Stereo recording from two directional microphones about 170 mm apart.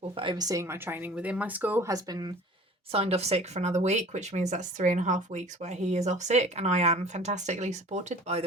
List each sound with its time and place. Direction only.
0.2 s speech: 25° right (ahead or behind)
2.9 s speech: 35° right (ahead or behind)